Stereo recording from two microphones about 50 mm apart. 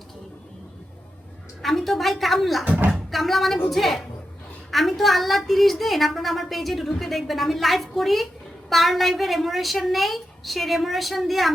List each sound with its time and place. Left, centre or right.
1.6 s a woman's voice: centre